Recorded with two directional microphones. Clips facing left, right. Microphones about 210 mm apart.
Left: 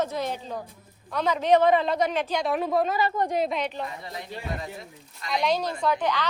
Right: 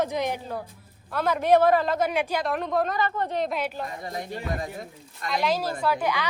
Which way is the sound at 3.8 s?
45° right (ahead or behind).